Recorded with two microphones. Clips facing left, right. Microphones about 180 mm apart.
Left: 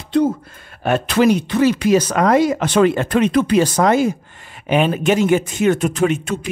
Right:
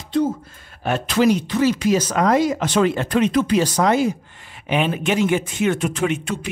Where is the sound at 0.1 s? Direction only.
65° left (ahead or behind).